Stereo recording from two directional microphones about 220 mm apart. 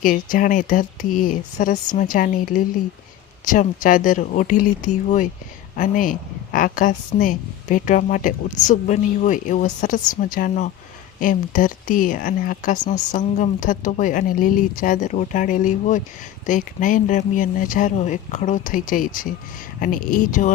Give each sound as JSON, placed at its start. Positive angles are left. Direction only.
{"t": 0.0, "sound": "speech", "side_deg": 40}